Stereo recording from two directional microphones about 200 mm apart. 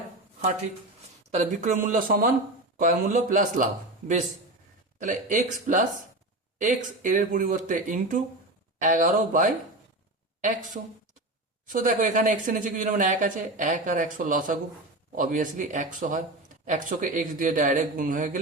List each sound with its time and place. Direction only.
1.3 s a woman's voice: 35° right (ahead or behind)
4.9 s a woman's voice: 40° right (ahead or behind)
11.7 s a woman's voice: 40° right (ahead or behind)